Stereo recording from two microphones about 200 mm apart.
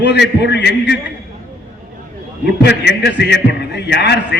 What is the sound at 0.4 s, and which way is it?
Speech, 55° left (ahead or behind).